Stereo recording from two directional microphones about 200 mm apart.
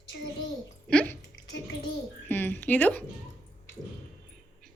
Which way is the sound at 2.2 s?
10° left (ahead or behind).